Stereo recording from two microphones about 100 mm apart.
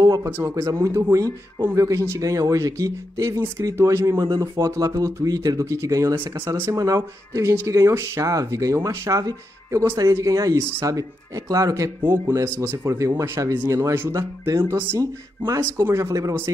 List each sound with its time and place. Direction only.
0.4 s speech: 30° right (ahead or behind)
6.2 s speech: 50° right (ahead or behind)
6.7 s speech: 35° right (ahead or behind)
14.1 s speech: 35° right (ahead or behind)
14.6 s speech: 25° right (ahead or behind)